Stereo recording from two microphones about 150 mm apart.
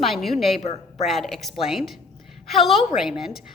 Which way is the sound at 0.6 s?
45° left (ahead or behind).